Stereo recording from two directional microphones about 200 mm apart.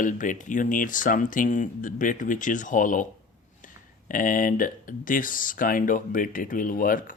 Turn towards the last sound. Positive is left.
turn(degrees=45)  # may be behind; listen again after turning